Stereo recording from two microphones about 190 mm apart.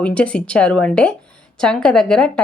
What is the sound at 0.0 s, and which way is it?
A woman's voice, 5° left (ahead or behind).